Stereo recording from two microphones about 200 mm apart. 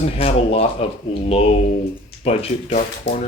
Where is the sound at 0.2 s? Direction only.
30° left (ahead or behind).